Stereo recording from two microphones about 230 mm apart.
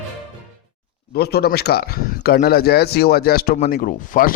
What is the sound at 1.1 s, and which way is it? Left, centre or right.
A man's voice, left.